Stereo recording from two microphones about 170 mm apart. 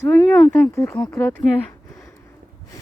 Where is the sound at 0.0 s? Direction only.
10° left (ahead or behind).